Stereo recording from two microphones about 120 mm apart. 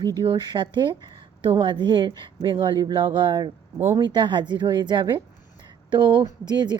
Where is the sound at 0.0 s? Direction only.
35° right (ahead or behind).